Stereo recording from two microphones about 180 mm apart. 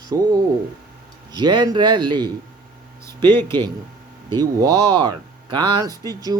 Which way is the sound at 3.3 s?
10° left (ahead or behind).